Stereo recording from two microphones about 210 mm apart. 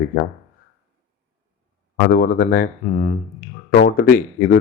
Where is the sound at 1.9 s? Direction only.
50° left (ahead or behind).